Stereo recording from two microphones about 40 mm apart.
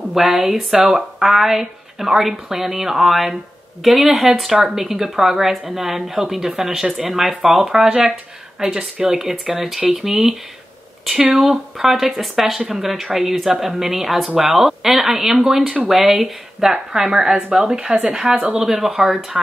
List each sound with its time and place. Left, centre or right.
0.1 s speech: centre
11.8 s speech: centre
16.7 s a woman's voice: centre
18.6 s speech: centre